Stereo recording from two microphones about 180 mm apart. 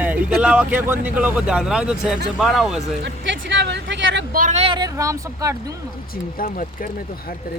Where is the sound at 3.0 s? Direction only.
80° right.